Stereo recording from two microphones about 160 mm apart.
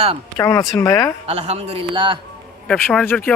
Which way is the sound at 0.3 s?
20° left (ahead or behind).